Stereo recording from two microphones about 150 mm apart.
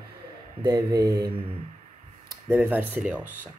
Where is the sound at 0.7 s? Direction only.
25° right (ahead or behind).